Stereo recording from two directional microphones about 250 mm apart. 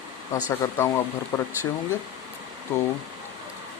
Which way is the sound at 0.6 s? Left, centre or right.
Centre.